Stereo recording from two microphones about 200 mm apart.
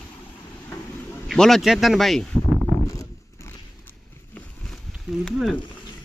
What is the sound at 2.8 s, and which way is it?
Biting, 15° left (ahead or behind).